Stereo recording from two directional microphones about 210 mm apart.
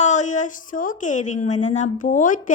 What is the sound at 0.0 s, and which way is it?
A woman's voice, 35° left (ahead or behind).